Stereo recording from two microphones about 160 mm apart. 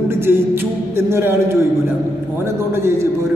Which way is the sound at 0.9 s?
15° right (ahead or behind).